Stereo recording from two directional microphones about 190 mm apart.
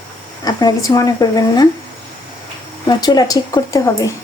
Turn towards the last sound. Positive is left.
turn(degrees=15)  # may be behind; listen again after turning